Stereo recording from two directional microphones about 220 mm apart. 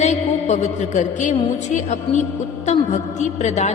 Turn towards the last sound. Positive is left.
turn(degrees=30)  # may be behind; listen again after turning